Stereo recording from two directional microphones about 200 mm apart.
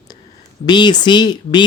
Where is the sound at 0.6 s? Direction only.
20° left (ahead or behind).